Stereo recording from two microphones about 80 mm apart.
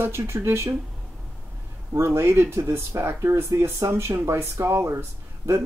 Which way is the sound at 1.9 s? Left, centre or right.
Right.